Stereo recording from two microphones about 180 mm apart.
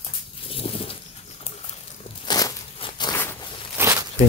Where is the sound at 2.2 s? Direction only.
20° left (ahead or behind).